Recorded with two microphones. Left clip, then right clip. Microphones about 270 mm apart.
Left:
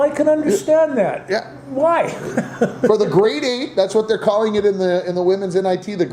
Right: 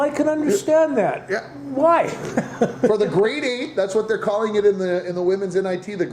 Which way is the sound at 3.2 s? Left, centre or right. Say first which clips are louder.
Left 4 dB; left.